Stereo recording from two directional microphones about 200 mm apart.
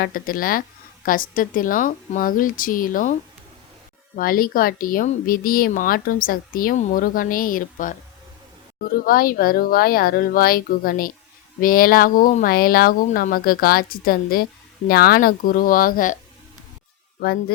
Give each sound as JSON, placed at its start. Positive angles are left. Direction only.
{"t": 0.0, "sound": "speech", "side_deg": 45}